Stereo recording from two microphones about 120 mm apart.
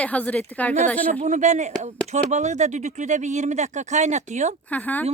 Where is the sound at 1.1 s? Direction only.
85° right.